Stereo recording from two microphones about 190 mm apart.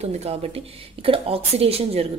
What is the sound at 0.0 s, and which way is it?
A woman's voice, 35° right (ahead or behind).